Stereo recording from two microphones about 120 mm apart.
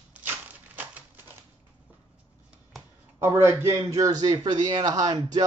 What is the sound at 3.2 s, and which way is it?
A man's voice, 20° right (ahead or behind).